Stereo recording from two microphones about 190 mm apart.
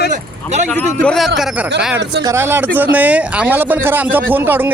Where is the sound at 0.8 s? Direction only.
5° left (ahead or behind).